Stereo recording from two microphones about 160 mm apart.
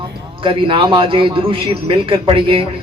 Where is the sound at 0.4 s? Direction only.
30° right (ahead or behind).